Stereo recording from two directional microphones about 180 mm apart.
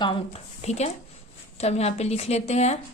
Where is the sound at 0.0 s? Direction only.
30° left (ahead or behind).